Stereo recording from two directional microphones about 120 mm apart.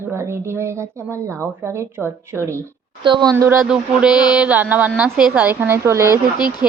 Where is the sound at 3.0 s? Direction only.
40° right (ahead or behind).